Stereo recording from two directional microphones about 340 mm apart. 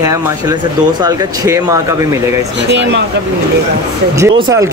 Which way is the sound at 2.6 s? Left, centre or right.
Right.